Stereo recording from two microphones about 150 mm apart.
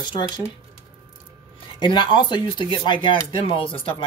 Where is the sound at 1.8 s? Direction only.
30° left (ahead or behind).